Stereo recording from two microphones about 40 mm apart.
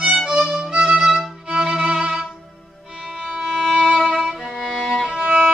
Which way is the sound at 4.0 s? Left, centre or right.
Centre.